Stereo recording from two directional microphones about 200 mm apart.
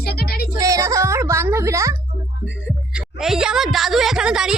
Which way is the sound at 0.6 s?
15° right (ahead or behind).